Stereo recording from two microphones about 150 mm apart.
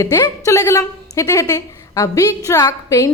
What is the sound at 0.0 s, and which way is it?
A woman's voice, 20° left (ahead or behind).